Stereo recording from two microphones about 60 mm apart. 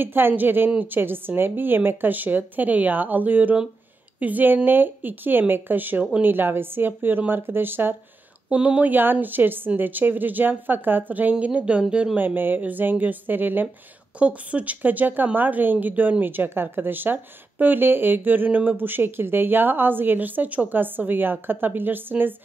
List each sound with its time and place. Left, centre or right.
0.0 s a woman's voice: right
8.5 s a woman's voice: right
12.4 s a woman's voice: right